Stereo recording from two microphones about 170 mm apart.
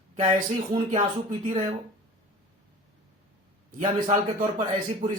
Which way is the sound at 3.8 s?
45° right (ahead or behind).